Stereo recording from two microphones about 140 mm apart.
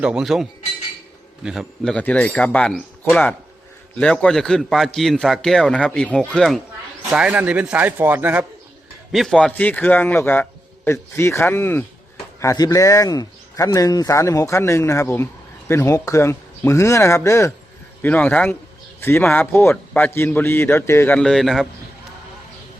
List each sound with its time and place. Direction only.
0.0 s a man's voice: 5° right (ahead or behind)
1.5 s a man's voice: centre (ahead or behind)
9.1 s a man's voice: 5° left (ahead or behind)